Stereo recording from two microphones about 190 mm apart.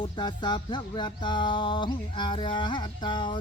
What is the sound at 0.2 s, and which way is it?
Music, 25° left (ahead or behind).